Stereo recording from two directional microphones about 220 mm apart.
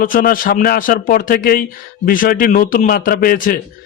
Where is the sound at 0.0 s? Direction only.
40° left (ahead or behind).